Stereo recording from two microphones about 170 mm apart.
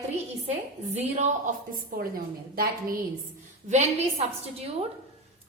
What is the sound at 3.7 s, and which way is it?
A woman's voice, 40° right (ahead or behind).